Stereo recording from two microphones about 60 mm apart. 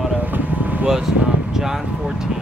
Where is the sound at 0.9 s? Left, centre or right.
Centre.